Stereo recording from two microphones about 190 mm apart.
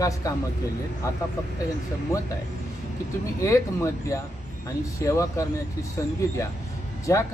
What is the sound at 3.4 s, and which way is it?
Speech, 15° left (ahead or behind).